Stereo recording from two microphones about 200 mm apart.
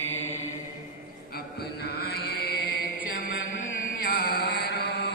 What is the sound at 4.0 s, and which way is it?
Chant, 50° left (ahead or behind).